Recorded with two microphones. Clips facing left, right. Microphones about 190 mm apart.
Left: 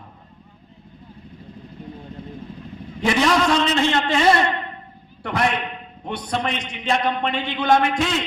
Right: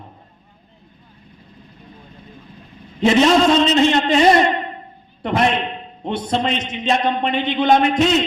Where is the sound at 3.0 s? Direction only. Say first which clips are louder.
Right 6 dB; 20° right (ahead or behind).